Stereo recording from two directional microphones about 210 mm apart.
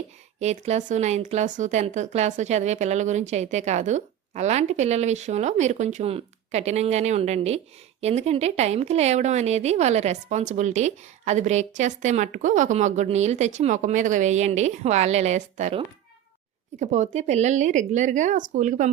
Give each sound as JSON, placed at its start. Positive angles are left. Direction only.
{"t": 0.3, "sound": "speech", "side_deg": -30}
{"t": 16.8, "sound": "speech", "side_deg": -35}